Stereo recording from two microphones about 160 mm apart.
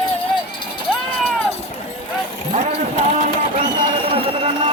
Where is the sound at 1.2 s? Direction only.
10° left (ahead or behind).